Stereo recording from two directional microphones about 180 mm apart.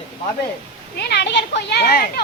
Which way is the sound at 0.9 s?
70° left (ahead or behind).